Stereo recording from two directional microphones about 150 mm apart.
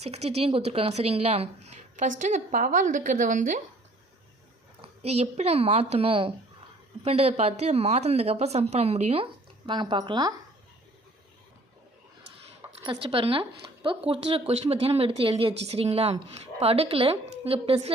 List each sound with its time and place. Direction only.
0.0 s a woman's voice: 45° right (ahead or behind); by 3.6 s 60° right (ahead or behind)
4.8 s a woman's voice: 45° right (ahead or behind); by 10.3 s 30° right (ahead or behind)
12.8 s speech: 35° right (ahead or behind)